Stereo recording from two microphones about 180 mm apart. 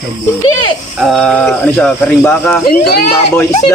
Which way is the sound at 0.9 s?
Centre (ahead or behind).